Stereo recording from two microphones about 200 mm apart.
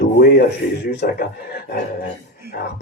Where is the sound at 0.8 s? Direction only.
55° left (ahead or behind).